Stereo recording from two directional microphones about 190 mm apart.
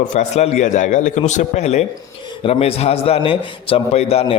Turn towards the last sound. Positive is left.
turn(degrees=30)  # may be behind; listen again after turning